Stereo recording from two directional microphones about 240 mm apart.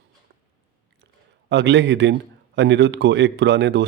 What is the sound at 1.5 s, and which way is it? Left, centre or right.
Speech, right.